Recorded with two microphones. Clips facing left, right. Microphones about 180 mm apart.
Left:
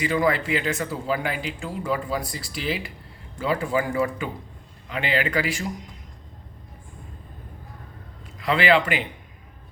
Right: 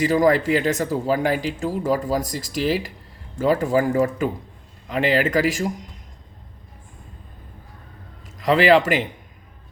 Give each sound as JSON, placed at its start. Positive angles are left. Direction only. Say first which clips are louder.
{"t": 0.0, "sound": "speech", "louder": "right 5 dB", "side_deg": -40}
{"t": 8.4, "sound": "speech", "louder": "right 5 dB", "side_deg": -40}